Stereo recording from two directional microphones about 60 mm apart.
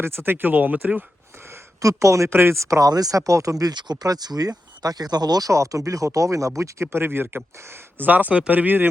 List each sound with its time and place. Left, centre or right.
0.0 s speech: right
1.8 s speech: right
2.3 s speech: right
6.9 s speech: right